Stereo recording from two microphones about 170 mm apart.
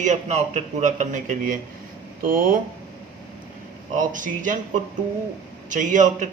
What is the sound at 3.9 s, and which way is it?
Speech, 50° right (ahead or behind).